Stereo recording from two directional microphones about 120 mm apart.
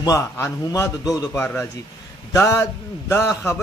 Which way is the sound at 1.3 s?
15° left (ahead or behind).